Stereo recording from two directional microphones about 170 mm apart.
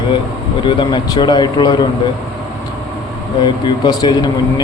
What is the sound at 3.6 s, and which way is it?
Speech, 25° left (ahead or behind).